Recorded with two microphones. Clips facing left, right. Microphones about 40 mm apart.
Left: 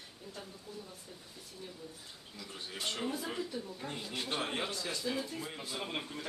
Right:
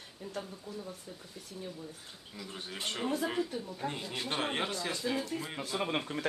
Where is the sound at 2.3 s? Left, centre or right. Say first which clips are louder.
Right 4 dB; centre.